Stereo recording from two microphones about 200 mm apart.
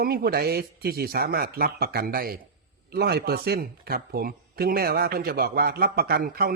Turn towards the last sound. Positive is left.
turn(degrees=-50)  # may be behind; listen again after turning